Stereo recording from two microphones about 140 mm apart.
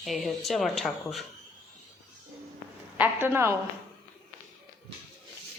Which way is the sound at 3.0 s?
15° right (ahead or behind).